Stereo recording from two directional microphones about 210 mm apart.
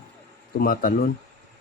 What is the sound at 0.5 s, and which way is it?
Speech, 45° left (ahead or behind).